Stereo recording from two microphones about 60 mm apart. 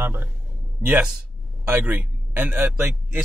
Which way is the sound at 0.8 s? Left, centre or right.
Right.